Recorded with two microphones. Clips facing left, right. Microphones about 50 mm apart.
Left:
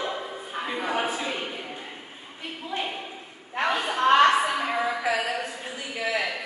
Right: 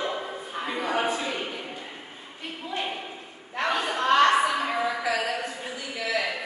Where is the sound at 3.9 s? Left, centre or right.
Centre.